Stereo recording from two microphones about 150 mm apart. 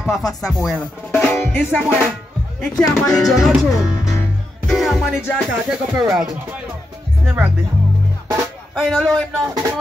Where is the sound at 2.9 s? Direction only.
5° left (ahead or behind).